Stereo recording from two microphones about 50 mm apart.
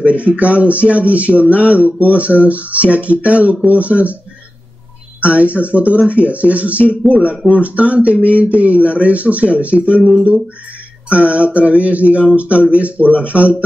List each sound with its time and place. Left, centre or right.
0.0 s speech: right
5.2 s speech: right
11.1 s speech: right